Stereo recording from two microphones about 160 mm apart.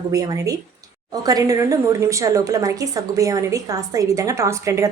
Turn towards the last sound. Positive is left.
turn(degrees=-20)  # may be behind; listen again after turning